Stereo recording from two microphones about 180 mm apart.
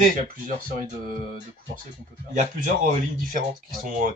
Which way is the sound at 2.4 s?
45° right (ahead or behind).